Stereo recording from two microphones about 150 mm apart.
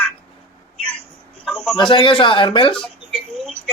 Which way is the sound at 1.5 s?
Centre (ahead or behind).